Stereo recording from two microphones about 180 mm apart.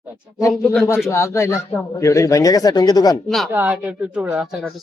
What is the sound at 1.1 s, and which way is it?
Speech, 15° left (ahead or behind).